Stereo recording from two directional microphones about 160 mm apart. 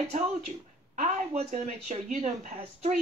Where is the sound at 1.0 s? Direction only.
45° right (ahead or behind).